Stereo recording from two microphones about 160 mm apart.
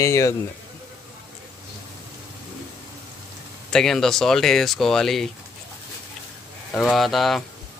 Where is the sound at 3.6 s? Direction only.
5° left (ahead or behind).